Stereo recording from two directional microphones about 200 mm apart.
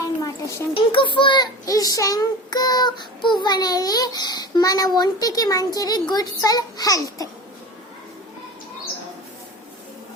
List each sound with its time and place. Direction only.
0.2 s a child's voice: 15° left (ahead or behind)